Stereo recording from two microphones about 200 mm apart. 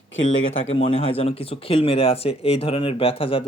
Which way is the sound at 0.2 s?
30° left (ahead or behind).